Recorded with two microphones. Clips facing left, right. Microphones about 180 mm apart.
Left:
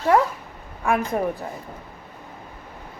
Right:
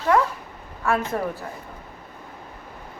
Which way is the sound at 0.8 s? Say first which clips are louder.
Left 1 dB; 15° left (ahead or behind).